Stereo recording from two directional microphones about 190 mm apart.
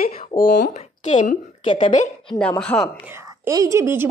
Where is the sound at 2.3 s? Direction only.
5° left (ahead or behind).